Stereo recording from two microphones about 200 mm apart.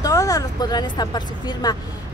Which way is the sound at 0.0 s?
15° left (ahead or behind).